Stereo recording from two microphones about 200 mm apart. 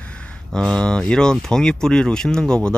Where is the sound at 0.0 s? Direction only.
5° left (ahead or behind).